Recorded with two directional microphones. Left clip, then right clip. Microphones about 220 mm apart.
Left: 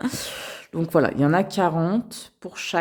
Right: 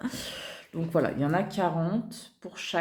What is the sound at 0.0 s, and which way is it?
Speech, 45° left (ahead or behind).